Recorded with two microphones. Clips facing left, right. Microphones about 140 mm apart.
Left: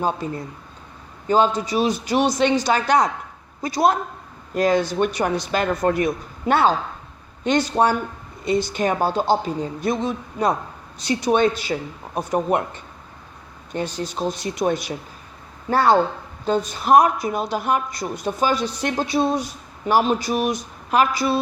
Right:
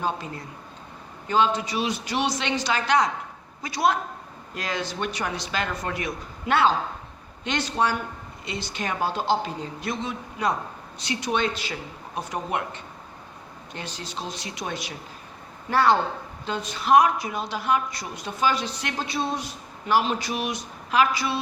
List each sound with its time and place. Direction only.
1.3 s a woman's voice: 40° left (ahead or behind)